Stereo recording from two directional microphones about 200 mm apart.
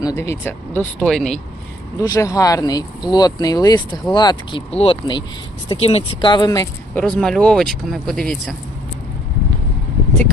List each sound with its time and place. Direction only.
0.0 s speech: 15° left (ahead or behind)
2.0 s speech: 15° left (ahead or behind)
7.0 s speech: 5° left (ahead or behind)